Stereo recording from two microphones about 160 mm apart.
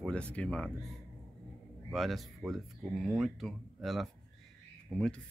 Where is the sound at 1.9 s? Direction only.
Centre (ahead or behind).